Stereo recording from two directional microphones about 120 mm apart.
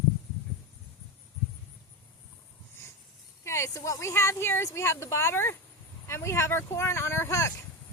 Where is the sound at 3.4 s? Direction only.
25° left (ahead or behind).